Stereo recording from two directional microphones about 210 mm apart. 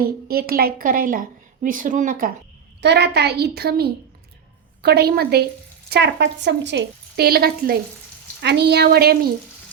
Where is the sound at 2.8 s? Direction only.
55° right (ahead or behind).